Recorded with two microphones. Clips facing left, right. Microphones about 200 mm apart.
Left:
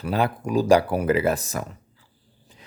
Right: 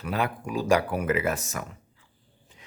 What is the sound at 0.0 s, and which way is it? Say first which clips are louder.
Speech: left 5 dB; 35° left (ahead or behind).